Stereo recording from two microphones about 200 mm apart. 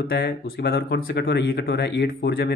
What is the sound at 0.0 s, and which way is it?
Speech, 50° left (ahead or behind).